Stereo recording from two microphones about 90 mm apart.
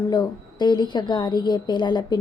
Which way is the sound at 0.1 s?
50° left (ahead or behind).